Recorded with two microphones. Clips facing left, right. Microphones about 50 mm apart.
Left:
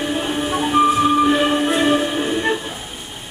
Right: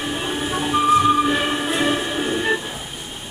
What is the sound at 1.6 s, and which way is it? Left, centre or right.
Music, centre.